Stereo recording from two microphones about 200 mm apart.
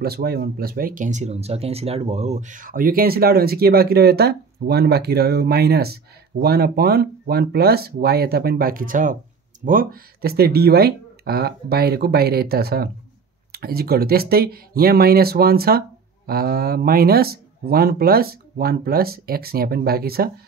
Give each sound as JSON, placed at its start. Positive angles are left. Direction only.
{"t": 0.0, "sound": "speech", "side_deg": -50}